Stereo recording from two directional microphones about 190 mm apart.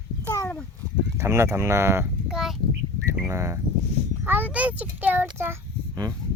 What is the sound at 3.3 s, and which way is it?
A child's voice, 15° right (ahead or behind).